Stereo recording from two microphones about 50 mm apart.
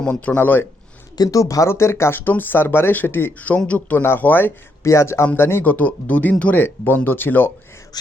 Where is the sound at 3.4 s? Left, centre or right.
Left.